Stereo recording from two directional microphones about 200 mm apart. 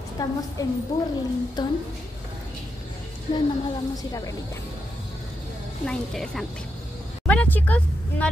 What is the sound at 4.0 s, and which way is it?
Speech, 15° left (ahead or behind).